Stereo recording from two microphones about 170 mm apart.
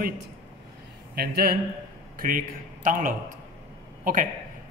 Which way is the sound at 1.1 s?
65° right (ahead or behind).